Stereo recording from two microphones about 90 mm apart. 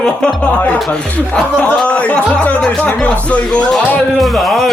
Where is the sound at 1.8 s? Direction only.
15° left (ahead or behind).